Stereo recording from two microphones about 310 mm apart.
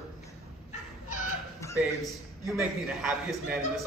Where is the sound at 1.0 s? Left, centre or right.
Left.